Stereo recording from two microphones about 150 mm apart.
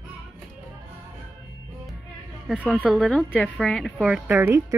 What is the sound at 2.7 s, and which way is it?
Speech, 5° right (ahead or behind).